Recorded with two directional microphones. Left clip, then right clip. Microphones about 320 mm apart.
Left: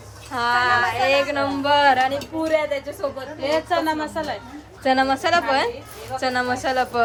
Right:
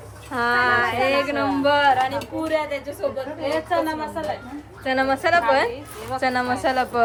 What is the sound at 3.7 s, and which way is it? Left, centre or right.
Speech, left.